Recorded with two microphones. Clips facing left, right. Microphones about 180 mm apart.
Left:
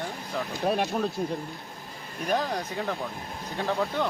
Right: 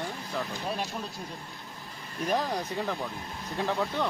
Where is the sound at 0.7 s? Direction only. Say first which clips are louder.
Left 11 dB; 60° left (ahead or behind).